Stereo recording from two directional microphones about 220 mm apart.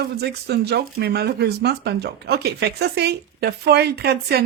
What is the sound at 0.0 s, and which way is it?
Speech, 50° right (ahead or behind).